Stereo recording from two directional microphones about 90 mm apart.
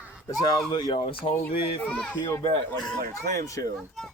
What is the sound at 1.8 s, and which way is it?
Speech, 10° left (ahead or behind).